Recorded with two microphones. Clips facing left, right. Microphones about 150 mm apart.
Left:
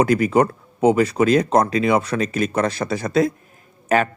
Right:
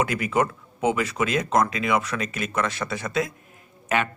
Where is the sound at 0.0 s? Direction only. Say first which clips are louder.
Left 7 dB; 35° left (ahead or behind).